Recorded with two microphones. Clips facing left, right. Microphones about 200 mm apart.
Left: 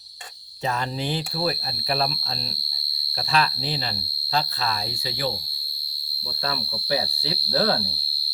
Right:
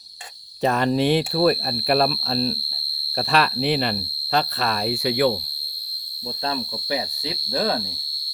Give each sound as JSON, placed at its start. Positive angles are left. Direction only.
{"t": 0.6, "sound": "speech", "side_deg": -60}
{"t": 3.3, "sound": "speech", "side_deg": -70}
{"t": 6.9, "sound": "speech", "side_deg": -15}